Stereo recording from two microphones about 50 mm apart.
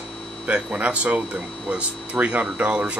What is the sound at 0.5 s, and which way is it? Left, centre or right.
Speech, right.